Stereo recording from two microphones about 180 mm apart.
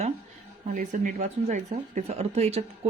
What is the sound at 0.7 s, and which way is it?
Speech, 45° right (ahead or behind).